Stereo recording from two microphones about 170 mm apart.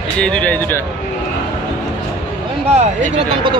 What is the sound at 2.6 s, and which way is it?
Speech, 40° right (ahead or behind).